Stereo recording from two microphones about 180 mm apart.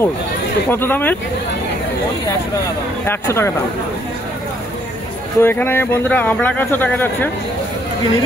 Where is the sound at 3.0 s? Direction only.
15° left (ahead or behind).